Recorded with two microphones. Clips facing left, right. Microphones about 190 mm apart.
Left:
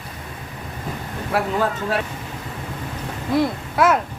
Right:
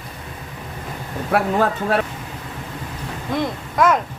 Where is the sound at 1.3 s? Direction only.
55° right (ahead or behind).